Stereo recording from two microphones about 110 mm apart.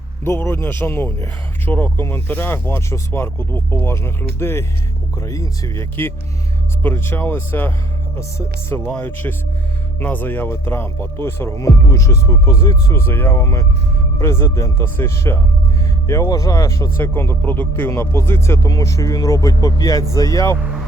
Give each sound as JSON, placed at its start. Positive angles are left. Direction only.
{"t": 0.3, "sound": "speech", "side_deg": 25}
{"t": 9.0, "sound": "speech", "side_deg": 15}